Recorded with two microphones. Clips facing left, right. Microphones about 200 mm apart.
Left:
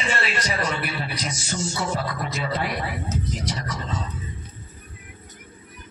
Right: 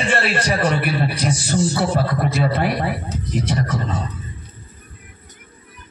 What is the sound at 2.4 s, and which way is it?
A man's voice, 55° right (ahead or behind).